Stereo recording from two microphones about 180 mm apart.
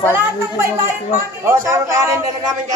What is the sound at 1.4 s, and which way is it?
Speech, 15° right (ahead or behind).